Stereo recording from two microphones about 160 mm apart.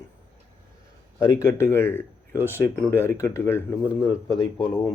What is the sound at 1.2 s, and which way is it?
Speech, 20° left (ahead or behind).